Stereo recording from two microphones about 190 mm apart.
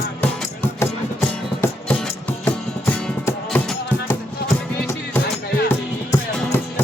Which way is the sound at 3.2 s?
10° left (ahead or behind).